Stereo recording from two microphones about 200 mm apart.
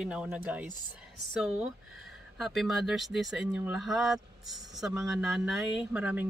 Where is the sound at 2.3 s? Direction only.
Centre (ahead or behind).